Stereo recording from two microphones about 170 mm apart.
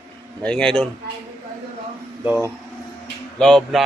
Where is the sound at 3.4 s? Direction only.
5° left (ahead or behind).